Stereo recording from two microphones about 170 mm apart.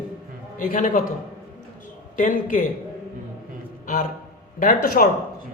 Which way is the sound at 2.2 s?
50° left (ahead or behind).